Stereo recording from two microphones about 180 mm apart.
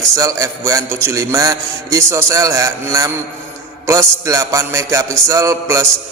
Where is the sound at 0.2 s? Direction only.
20° right (ahead or behind).